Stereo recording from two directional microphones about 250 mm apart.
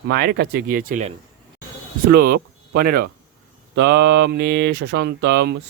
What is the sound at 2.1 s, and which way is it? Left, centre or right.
Speech, right.